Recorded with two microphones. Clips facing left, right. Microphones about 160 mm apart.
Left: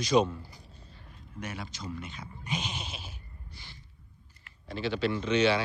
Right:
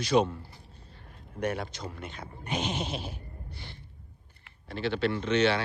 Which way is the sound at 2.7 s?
30° right (ahead or behind).